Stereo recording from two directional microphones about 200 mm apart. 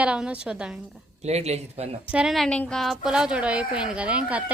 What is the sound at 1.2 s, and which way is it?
Speech, 35° right (ahead or behind).